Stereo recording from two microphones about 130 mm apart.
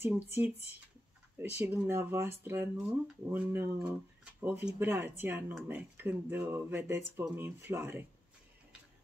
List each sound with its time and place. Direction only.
0.0 s speech: 15° right (ahead or behind)